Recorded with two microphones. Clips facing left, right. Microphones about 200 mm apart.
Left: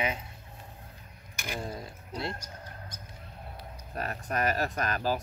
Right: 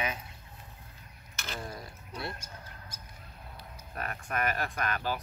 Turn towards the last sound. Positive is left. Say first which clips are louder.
# left 3 dB
turn(degrees=40)  # may be behind; listen again after turning